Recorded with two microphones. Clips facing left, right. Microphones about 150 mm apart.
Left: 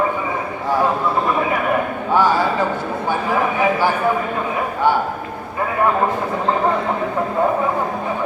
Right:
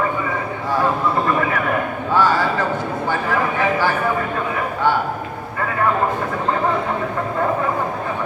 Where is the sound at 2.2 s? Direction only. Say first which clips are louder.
Left 1 dB; 15° left (ahead or behind).